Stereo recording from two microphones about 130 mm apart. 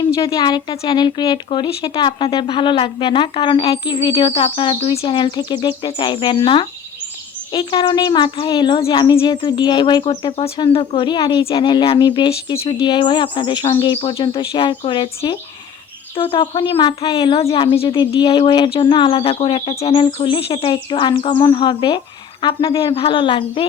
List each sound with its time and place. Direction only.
0.3 s a child's voice: 30° left (ahead or behind)